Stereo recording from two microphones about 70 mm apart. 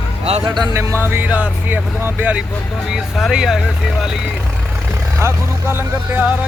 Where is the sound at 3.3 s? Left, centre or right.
Centre.